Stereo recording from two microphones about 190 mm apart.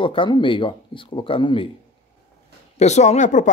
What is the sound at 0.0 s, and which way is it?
Speech, 25° left (ahead or behind).